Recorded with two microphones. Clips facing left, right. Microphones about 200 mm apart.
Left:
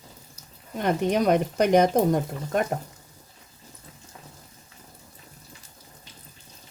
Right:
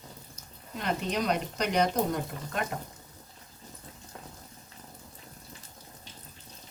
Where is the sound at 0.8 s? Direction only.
55° left (ahead or behind).